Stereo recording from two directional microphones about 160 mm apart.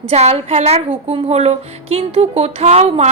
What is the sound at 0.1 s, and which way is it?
Speech, 40° right (ahead or behind).